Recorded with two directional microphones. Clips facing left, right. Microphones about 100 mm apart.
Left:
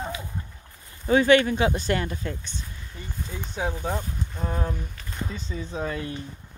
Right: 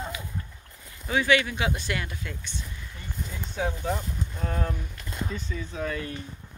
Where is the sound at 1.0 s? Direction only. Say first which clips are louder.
Left 6 dB; 40° left (ahead or behind).